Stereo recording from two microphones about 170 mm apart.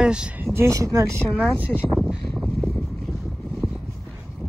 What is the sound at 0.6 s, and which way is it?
Speech, 15° right (ahead or behind).